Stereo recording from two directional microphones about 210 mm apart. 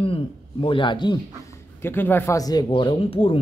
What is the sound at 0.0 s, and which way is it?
A man's voice, 25° left (ahead or behind).